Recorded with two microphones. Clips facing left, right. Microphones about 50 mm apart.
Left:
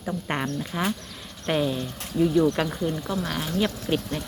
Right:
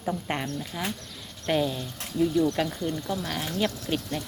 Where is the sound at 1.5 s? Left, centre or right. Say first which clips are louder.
Left 1 dB; centre.